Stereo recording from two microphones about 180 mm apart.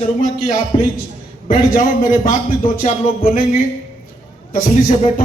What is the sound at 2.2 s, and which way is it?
A man's voice, 45° left (ahead or behind).